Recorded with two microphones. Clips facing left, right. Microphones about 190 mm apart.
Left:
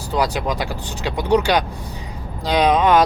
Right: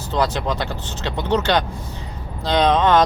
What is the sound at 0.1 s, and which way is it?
Speech, 10° left (ahead or behind).